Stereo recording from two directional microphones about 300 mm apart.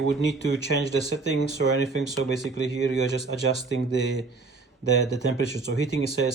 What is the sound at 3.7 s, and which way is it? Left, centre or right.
Speech, left.